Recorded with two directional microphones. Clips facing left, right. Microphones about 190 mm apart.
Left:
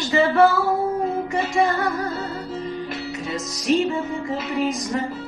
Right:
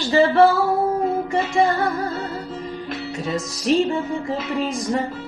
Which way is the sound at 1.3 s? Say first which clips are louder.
Right 1 dB; 30° right (ahead or behind).